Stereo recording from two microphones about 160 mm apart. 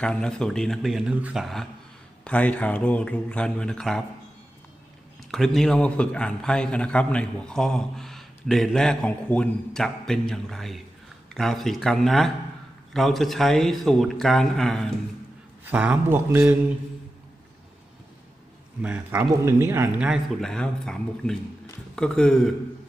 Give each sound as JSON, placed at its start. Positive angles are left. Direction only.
{"t": 0.0, "sound": "a man's voice", "side_deg": 5}
{"t": 5.3, "sound": "a man's voice", "side_deg": 0}
{"t": 15.6, "sound": "speech", "side_deg": -10}
{"t": 18.8, "sound": "a man's voice", "side_deg": -10}